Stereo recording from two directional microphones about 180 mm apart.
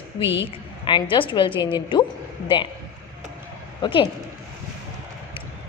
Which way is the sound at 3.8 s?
30° left (ahead or behind).